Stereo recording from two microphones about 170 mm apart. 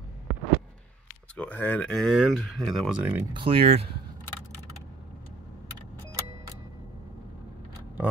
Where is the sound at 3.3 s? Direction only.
30° right (ahead or behind).